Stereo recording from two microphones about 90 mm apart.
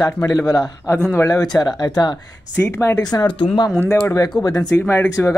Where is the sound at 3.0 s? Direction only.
45° left (ahead or behind).